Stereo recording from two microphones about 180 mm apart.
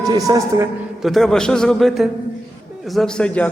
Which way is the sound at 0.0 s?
20° right (ahead or behind).